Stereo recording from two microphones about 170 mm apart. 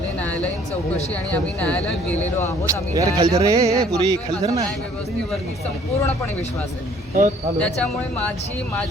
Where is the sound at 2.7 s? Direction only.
20° right (ahead or behind).